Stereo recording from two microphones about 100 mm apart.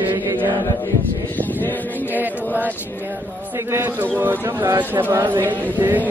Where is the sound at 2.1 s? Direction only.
15° right (ahead or behind).